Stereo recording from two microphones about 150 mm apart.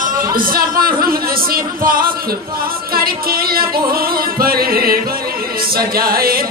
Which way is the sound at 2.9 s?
85° right.